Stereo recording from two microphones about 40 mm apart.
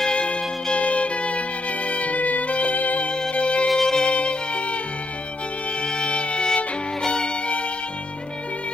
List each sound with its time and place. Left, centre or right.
0.0 s music: left
3.1 s music: left
3.6 s music: centre
4.1 s music: left
5.8 s music: left